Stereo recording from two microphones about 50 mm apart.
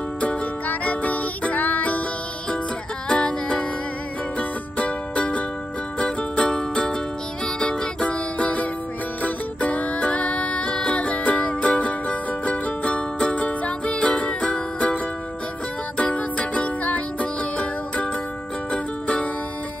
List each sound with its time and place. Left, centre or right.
0.2 s music: left
3.1 s music: left
16.0 s music: left